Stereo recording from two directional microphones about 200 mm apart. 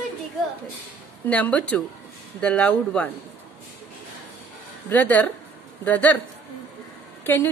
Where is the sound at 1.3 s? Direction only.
5° left (ahead or behind).